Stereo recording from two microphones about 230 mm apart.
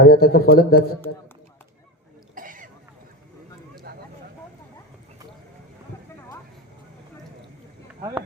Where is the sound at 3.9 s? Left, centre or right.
Right.